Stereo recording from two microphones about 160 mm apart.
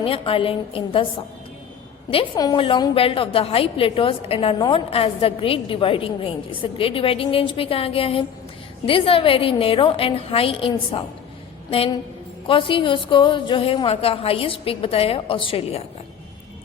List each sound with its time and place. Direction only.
0.0 s a woman's voice: 35° left (ahead or behind)
2.3 s a woman's voice: 25° left (ahead or behind)
12.5 s a woman's voice: 35° left (ahead or behind)